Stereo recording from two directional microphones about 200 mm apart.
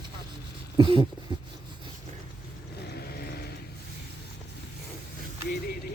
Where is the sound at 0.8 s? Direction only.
25° right (ahead or behind).